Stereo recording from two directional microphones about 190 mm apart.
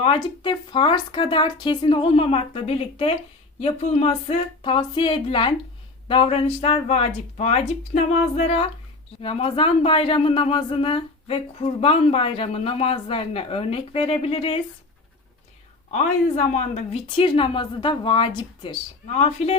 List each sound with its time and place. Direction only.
0.0 s speech: 25° left (ahead or behind)
15.9 s speech: 35° left (ahead or behind)